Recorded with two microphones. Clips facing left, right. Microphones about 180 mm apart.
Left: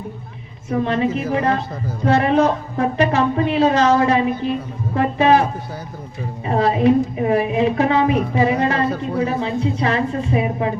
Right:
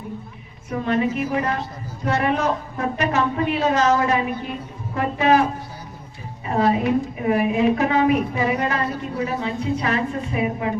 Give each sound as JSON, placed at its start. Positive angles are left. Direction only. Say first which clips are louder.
{"t": 0.9, "sound": "a woman's voice", "louder": "right 1 dB", "side_deg": 30}
{"t": 6.4, "sound": "a woman's voice", "louder": "left 3 dB", "side_deg": 30}